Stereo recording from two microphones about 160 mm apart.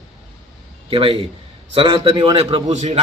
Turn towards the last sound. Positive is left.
turn(degrees=-45)  # may be behind; listen again after turning